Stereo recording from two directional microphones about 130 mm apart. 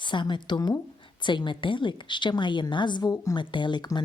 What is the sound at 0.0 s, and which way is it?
Speech, 35° left (ahead or behind).